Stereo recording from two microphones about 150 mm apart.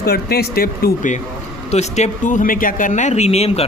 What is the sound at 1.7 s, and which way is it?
Speech, 50° left (ahead or behind).